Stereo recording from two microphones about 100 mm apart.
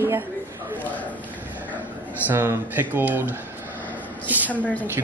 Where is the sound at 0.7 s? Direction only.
15° left (ahead or behind).